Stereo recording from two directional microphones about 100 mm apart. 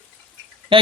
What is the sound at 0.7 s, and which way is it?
Speech, 60° right (ahead or behind).